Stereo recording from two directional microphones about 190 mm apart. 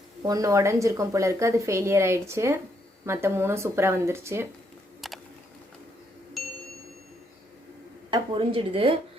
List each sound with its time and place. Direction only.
0.3 s a woman's voice: 15° right (ahead or behind)
4.9 s a sound: centre (ahead or behind)
6.4 s ding: centre (ahead or behind)
8.1 s a woman's voice: 30° right (ahead or behind)